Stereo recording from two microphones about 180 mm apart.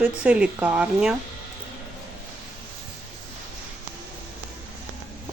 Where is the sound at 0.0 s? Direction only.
5° right (ahead or behind).